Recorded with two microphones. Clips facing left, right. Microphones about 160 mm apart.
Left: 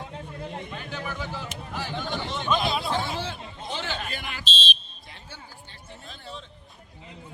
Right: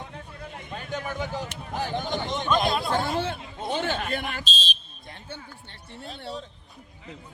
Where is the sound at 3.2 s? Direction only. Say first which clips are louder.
Right 5 dB; 55° right (ahead or behind).